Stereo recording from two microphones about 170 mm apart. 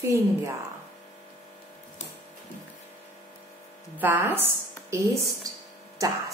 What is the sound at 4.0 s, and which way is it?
A woman's voice, 10° right (ahead or behind).